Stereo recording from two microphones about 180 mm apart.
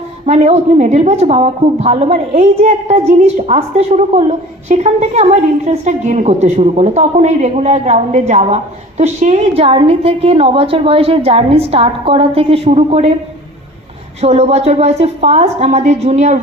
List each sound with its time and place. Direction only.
0.3 s a woman's voice: 35° right (ahead or behind)
14.2 s a woman's voice: 35° right (ahead or behind)